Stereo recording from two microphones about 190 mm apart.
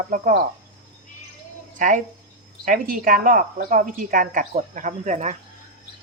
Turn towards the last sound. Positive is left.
turn(degrees=-40)  # may be behind; listen again after turning